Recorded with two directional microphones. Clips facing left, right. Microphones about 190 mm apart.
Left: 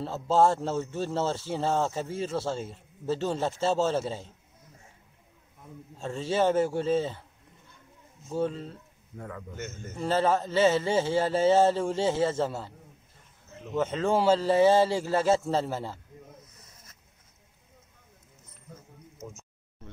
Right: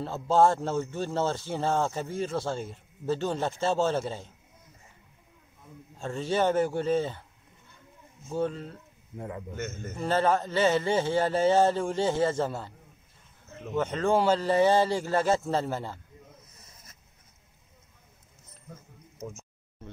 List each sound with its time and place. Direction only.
0.0 s a man's voice: 5° left (ahead or behind)
5.9 s a man's voice: 5° left (ahead or behind)
8.3 s a man's voice: centre (ahead or behind)
9.1 s a man's voice: 25° right (ahead or behind)
9.9 s a man's voice: 5° left (ahead or behind)
13.7 s a man's voice: 5° left (ahead or behind)